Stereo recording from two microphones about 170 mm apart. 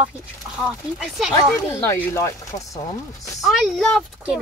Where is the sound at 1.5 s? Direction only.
15° left (ahead or behind).